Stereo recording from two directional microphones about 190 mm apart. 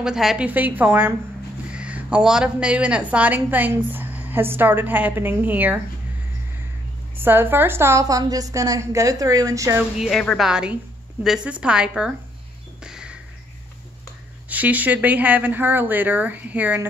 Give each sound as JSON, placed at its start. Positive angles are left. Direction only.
{"t": 0.0, "sound": "a woman's voice", "side_deg": -5}
{"t": 7.2, "sound": "a woman's voice", "side_deg": -10}
{"t": 9.9, "sound": "a woman's voice", "side_deg": 0}
{"t": 12.8, "sound": "crow", "side_deg": -5}
{"t": 14.5, "sound": "a woman's voice", "side_deg": -10}